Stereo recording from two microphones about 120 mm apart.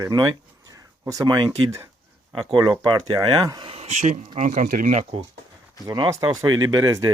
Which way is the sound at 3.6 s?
60° right (ahead or behind).